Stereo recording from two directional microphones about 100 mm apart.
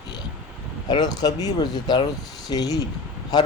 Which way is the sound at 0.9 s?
45° left (ahead or behind).